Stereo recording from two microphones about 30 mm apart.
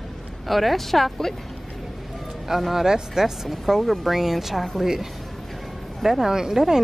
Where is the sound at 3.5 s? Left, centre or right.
Centre.